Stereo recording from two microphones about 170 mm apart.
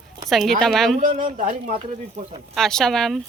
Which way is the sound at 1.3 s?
55° right (ahead or behind).